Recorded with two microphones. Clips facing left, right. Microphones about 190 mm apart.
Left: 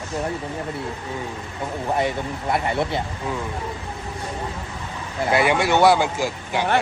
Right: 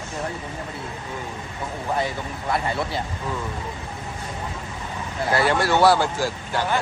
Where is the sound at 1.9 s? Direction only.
25° left (ahead or behind).